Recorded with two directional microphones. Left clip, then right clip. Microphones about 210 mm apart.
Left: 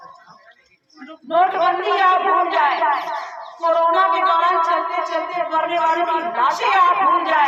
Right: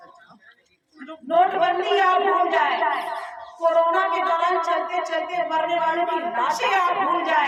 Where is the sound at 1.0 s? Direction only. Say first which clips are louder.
Left 2 dB; 30° left (ahead or behind).